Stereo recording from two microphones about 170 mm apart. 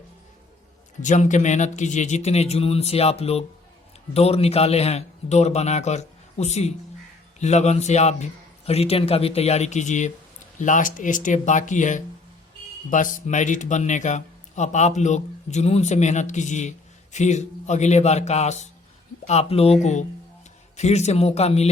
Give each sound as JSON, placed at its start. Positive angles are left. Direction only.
{"t": 1.0, "sound": "a man's voice", "side_deg": 45}